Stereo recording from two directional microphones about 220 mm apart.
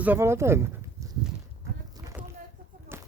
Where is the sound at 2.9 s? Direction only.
10° right (ahead or behind).